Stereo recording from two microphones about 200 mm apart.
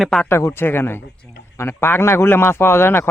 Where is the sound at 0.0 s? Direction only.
5° left (ahead or behind).